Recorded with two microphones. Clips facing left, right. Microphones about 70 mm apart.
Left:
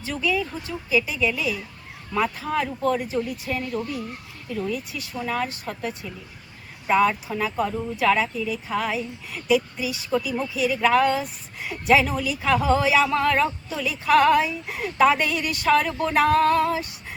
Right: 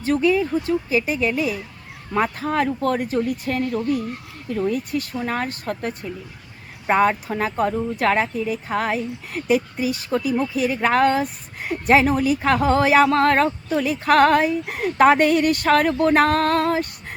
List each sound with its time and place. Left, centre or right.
0.0 s a woman's voice: right